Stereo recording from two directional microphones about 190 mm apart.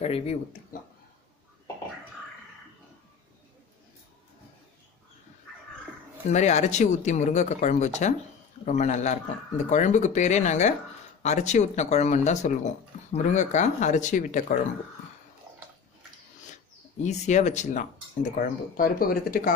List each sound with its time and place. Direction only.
0.0 s speech: 35° left (ahead or behind)
6.3 s speech: 35° left (ahead or behind)
17.0 s speech: 40° left (ahead or behind)